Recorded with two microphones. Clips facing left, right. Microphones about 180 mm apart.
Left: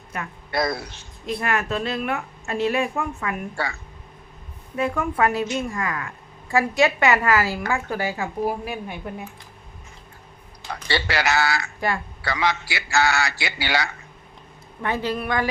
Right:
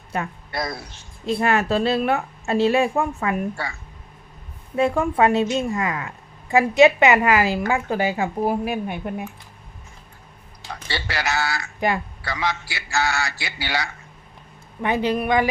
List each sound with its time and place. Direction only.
0.1 s speech: 30° right (ahead or behind)
0.5 s a man's voice: 70° left (ahead or behind)
1.2 s a woman's voice: 30° right (ahead or behind)
4.8 s a woman's voice: 25° right (ahead or behind)
10.8 s a man's voice: 70° left (ahead or behind)
14.8 s speech: 15° right (ahead or behind)